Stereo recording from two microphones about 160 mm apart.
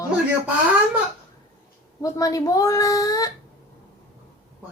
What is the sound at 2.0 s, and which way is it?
A woman's voice, 20° left (ahead or behind).